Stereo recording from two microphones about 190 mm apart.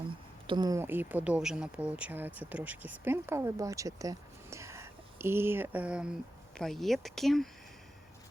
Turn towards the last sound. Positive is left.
turn(degrees=0)  # may be behind; listen again after turning